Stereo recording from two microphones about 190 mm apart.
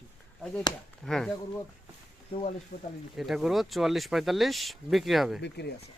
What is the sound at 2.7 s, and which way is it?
Speech, 60° left (ahead or behind).